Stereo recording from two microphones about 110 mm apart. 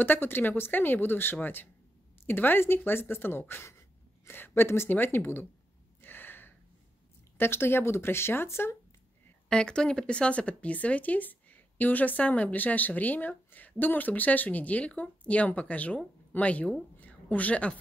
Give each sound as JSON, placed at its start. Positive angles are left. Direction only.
{"t": 0.0, "sound": "speech", "side_deg": 20}
{"t": 5.9, "sound": "gasp", "side_deg": 20}
{"t": 7.3, "sound": "speech", "side_deg": 20}
{"t": 9.5, "sound": "speech", "side_deg": 10}